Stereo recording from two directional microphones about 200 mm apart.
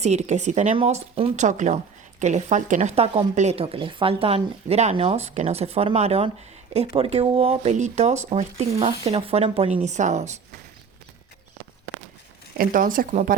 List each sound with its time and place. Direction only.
0.0 s speech: 35° right (ahead or behind)
12.5 s speech: 45° right (ahead or behind)